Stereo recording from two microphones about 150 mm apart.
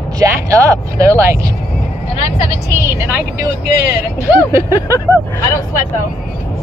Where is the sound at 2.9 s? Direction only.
15° right (ahead or behind).